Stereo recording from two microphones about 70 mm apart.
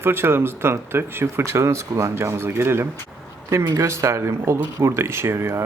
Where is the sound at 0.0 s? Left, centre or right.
Right.